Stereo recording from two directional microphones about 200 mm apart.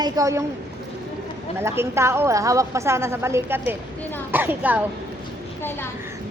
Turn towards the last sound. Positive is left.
turn(degrees=10)  # may be behind; listen again after turning